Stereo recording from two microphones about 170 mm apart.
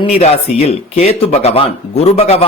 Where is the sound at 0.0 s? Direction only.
40° left (ahead or behind).